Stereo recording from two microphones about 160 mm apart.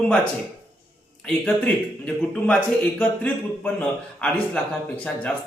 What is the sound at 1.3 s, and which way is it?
Speech, 5° left (ahead or behind).